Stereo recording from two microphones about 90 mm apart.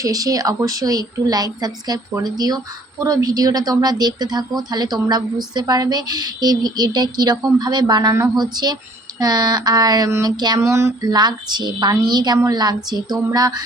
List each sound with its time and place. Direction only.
0.0 s a woman's voice: 40° right (ahead or behind)
10.6 s a sound: 30° right (ahead or behind)
11.0 s a woman's voice: 50° right (ahead or behind)